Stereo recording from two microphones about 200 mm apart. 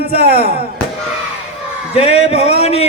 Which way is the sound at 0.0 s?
30° left (ahead or behind).